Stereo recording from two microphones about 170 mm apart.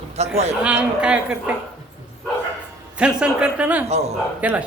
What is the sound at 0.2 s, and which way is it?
Speech, 40° right (ahead or behind).